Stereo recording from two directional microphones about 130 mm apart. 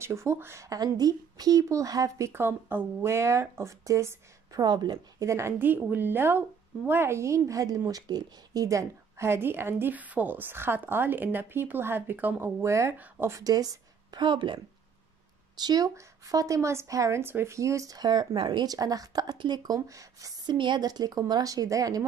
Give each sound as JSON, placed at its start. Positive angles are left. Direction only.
{"t": 0.0, "sound": "a woman's voice", "side_deg": -20}
{"t": 5.3, "sound": "a woman's voice", "side_deg": -20}
{"t": 13.4, "sound": "a woman's voice", "side_deg": -30}